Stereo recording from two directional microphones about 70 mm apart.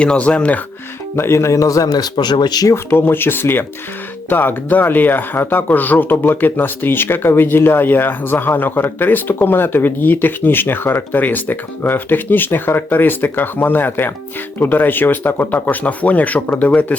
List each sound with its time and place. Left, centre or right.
0.0 s speech: centre
1.1 s speech: left
2.6 s speech: left